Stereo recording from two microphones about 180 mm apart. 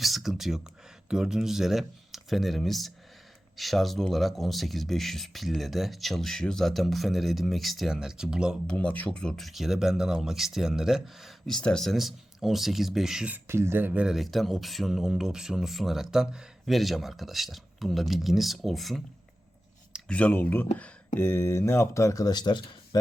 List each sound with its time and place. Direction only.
0.0 s speech: centre (ahead or behind)
8.7 s speech: 10° left (ahead or behind)
20.1 s speech: 5° left (ahead or behind); by 23.0 s 25° left (ahead or behind)